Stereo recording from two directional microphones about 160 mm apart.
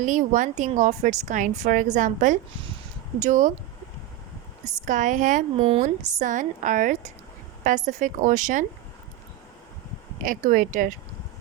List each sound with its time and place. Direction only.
0.0 s a woman's voice: 50° right (ahead or behind)
4.9 s a woman's voice: 55° right (ahead or behind)
10.2 s speech: 55° right (ahead or behind)